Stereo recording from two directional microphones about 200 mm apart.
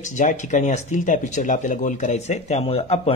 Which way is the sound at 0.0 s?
40° left (ahead or behind).